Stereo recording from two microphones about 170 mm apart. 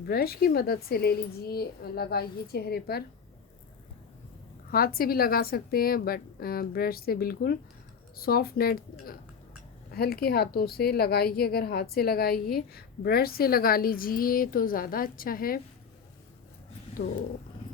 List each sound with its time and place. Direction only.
0.0 s a woman's voice: 65° left (ahead or behind)
4.7 s a woman's voice: 60° left (ahead or behind)